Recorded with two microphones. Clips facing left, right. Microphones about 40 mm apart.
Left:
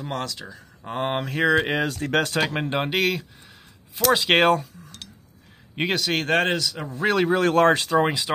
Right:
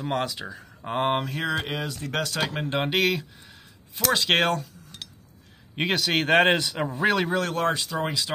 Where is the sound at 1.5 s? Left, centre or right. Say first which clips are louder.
Left 8 dB; left.